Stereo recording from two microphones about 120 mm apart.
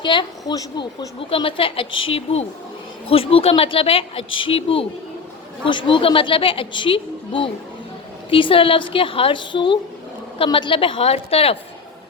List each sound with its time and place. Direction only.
0.0 s speech: 40° left (ahead or behind)